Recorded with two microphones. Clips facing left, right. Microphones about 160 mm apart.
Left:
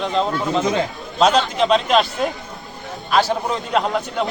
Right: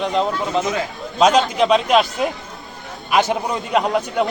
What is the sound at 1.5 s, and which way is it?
Speech, 5° right (ahead or behind).